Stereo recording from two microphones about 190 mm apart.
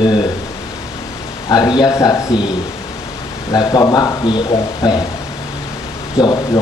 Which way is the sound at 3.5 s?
20° left (ahead or behind).